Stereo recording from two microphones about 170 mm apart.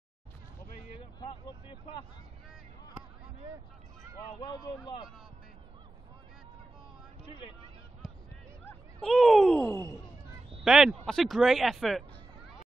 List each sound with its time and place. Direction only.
0.9 s speech: 30° left (ahead or behind)
4.4 s speech: 25° left (ahead or behind)
7.2 s speech: 30° left (ahead or behind)
9.0 s speech: centre (ahead or behind)